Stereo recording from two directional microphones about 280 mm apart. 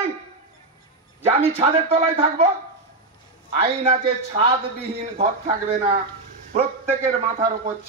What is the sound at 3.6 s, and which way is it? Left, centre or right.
Speech, right.